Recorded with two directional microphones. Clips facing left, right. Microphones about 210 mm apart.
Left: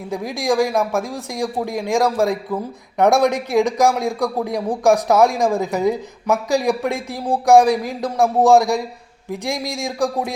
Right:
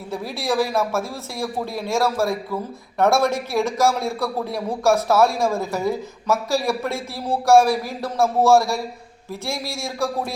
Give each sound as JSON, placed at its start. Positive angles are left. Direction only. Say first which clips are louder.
{"t": 0.1, "sound": "a man's voice", "louder": "left 4 dB", "side_deg": 15}